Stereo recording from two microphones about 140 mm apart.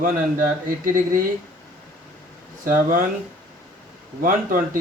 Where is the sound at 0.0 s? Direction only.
75° right (ahead or behind).